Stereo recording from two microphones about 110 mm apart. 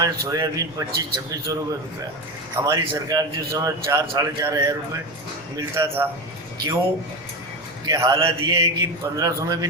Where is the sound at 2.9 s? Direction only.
35° right (ahead or behind).